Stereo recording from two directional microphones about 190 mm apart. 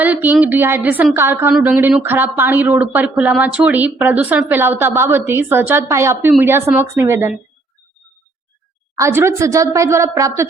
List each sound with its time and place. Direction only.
0.0 s a woman's voice: 10° right (ahead or behind)
9.0 s a woman's voice: 15° right (ahead or behind)